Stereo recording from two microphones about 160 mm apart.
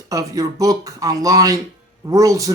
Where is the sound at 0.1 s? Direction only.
20° right (ahead or behind).